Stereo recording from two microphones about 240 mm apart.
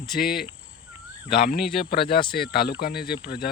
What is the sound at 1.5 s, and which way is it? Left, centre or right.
Speech, left.